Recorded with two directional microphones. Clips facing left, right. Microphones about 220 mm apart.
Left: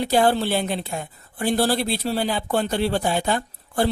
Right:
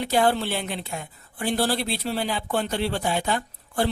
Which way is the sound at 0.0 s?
35° left (ahead or behind).